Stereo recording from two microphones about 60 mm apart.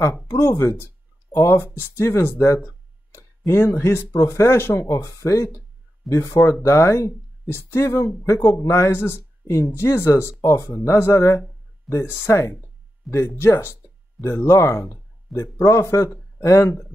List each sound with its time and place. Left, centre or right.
0.3 s speech: left
0.6 s speech: left
1.3 s speech: left
3.2 s a sound: left
3.6 s speech: left
6.0 s speech: left
10.4 s speech: left
14.4 s speech: left